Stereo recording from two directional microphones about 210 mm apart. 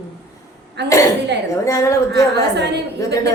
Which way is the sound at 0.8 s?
55° right (ahead or behind).